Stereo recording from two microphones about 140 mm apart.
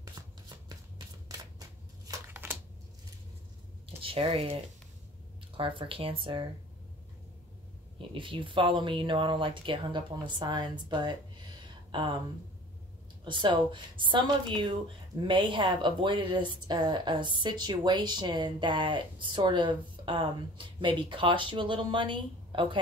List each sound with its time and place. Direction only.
0.2 s shuffling cards: 30° right (ahead or behind)
3.8 s speech: 40° right (ahead or behind)
5.6 s a woman's voice: 35° right (ahead or behind)
8.1 s a woman's voice: 40° right (ahead or behind)
13.2 s a woman's voice: 35° right (ahead or behind)